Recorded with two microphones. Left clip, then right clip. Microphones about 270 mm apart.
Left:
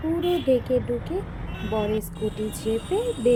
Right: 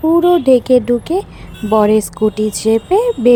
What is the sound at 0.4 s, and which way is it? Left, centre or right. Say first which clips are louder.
A woman's voice: right 12 dB; right.